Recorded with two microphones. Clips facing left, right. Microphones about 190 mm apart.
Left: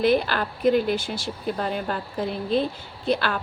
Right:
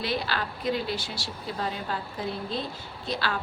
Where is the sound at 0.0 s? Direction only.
55° left (ahead or behind).